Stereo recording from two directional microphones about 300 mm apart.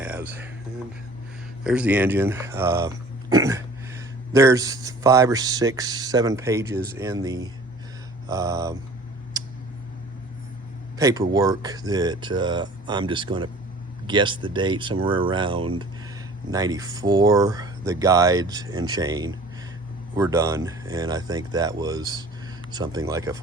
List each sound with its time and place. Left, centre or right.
0.0 s music: centre
1.6 s speech: centre
10.9 s speech: centre